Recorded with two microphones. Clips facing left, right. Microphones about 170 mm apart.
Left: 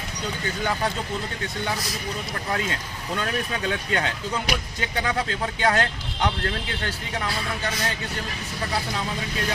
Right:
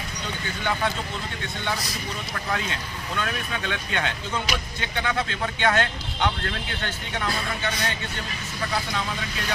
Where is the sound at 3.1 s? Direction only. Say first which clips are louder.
Left 2 dB; 35° left (ahead or behind).